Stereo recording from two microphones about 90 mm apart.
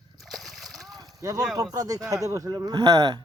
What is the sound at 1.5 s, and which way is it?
Speech, 40° right (ahead or behind).